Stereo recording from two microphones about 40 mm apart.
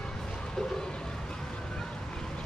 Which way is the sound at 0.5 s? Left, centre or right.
Centre.